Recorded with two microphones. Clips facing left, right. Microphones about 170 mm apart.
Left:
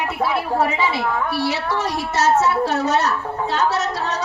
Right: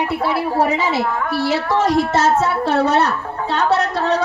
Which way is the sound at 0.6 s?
40° right (ahead or behind).